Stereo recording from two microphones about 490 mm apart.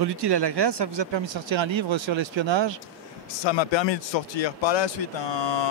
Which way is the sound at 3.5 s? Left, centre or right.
Left.